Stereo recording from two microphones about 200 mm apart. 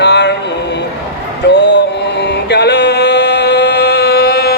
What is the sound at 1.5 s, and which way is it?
Music, 60° left (ahead or behind).